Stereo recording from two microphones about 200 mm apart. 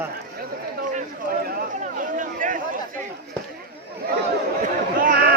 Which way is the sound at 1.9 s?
40° right (ahead or behind).